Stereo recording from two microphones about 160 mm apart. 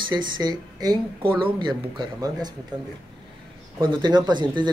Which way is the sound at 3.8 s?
30° right (ahead or behind).